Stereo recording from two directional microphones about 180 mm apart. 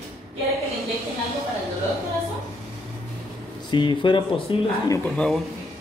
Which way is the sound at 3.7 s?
25° left (ahead or behind).